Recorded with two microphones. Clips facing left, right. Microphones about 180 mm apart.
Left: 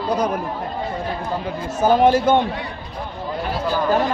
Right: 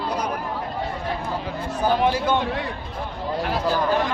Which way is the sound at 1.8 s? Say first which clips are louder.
Left 6 dB; 45° left (ahead or behind).